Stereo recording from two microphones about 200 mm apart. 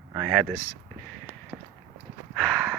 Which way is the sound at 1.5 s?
10° right (ahead or behind).